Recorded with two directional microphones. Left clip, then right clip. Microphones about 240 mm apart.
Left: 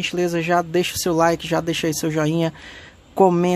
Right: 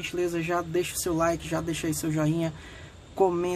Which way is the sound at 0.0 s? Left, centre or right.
Left.